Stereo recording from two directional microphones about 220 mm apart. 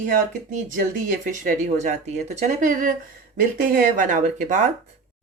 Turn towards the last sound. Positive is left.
turn(degrees=-35)  # may be behind; listen again after turning